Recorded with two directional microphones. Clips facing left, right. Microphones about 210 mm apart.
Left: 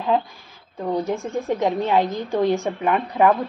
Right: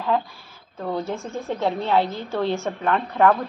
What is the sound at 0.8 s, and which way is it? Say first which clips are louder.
A woman's voice: left 3 dB; 15° left (ahead or behind).